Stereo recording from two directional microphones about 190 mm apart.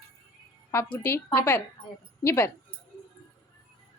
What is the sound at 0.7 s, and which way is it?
Speech, 15° left (ahead or behind).